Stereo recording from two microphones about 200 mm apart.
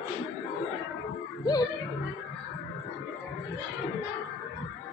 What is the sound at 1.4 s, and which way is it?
Music, 20° left (ahead or behind).